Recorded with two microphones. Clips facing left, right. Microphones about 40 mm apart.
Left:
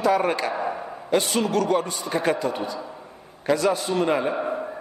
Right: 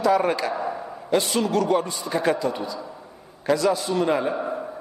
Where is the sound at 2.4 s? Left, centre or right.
Centre.